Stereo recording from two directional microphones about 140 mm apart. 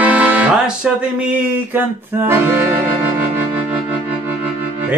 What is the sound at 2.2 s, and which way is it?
Music, 15° right (ahead or behind).